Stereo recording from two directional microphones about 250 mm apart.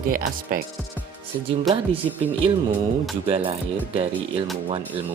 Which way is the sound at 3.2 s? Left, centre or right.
Right.